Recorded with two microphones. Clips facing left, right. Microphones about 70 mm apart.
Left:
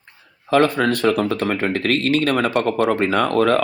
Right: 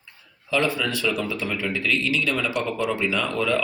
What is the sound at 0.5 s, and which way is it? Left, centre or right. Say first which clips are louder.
Speech: left 7 dB; left.